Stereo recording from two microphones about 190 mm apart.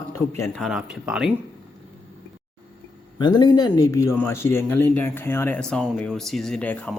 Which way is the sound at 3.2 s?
20° left (ahead or behind).